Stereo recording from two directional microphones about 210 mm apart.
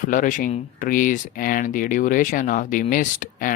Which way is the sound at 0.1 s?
40° left (ahead or behind).